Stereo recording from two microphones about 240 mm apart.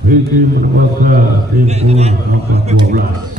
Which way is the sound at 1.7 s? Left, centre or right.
Right.